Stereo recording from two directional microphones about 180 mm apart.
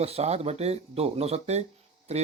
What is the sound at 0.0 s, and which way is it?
Speech, 35° right (ahead or behind).